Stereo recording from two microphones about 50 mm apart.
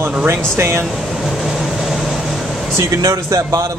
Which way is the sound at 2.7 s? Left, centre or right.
Right.